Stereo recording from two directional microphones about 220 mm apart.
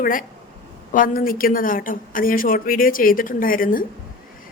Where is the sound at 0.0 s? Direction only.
40° left (ahead or behind).